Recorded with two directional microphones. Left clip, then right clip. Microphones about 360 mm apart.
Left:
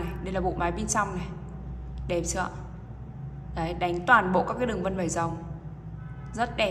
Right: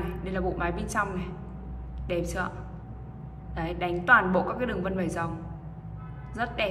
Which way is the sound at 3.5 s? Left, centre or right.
Centre.